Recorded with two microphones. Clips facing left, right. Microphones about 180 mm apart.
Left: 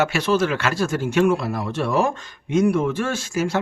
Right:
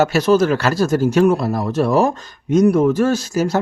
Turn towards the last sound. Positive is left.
turn(degrees=-40)  # may be behind; listen again after turning